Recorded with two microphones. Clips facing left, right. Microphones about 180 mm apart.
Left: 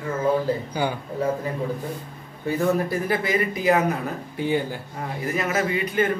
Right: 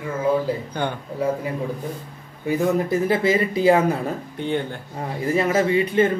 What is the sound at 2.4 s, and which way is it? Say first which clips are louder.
Speech: right 2 dB; 20° right (ahead or behind).